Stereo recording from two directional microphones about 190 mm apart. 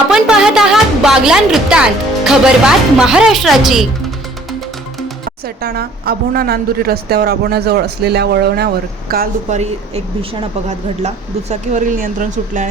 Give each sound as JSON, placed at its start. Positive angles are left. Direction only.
{"t": 0.1, "sound": "a woman's voice", "side_deg": -5}
{"t": 5.6, "sound": "a woman's voice", "side_deg": -55}
{"t": 10.7, "sound": "a woman's voice", "side_deg": -35}